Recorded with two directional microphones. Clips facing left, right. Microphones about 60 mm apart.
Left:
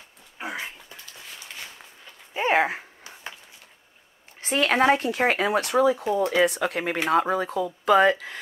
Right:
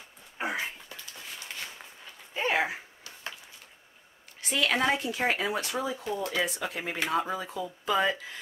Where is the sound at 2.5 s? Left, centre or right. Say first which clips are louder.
Left 7 dB; left.